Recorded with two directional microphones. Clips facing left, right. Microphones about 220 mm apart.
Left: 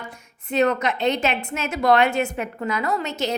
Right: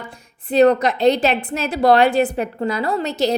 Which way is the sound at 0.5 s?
35° right (ahead or behind).